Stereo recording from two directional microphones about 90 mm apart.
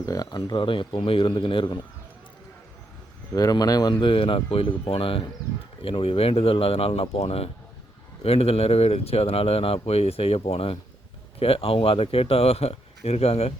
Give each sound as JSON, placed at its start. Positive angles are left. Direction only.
{"t": 0.0, "sound": "a man's voice", "side_deg": 45}
{"t": 3.3, "sound": "speech", "side_deg": 45}
{"t": 4.0, "sound": "speech", "side_deg": 85}